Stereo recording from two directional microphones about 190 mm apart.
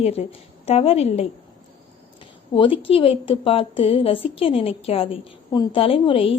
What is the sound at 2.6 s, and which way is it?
A woman's voice, 30° left (ahead or behind).